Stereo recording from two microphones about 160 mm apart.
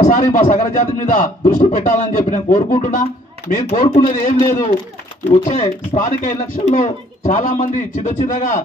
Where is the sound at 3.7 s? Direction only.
50° left (ahead or behind).